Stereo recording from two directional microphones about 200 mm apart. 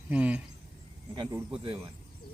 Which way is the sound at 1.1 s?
25° right (ahead or behind).